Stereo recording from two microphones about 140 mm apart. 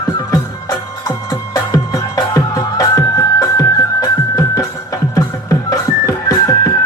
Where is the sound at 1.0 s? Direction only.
25° left (ahead or behind).